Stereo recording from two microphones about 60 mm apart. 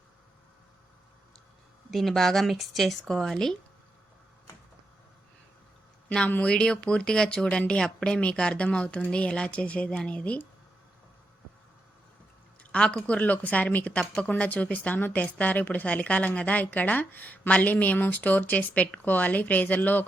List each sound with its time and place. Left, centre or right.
1.9 s speech: centre
6.1 s a man's voice: centre
12.7 s a woman's voice: centre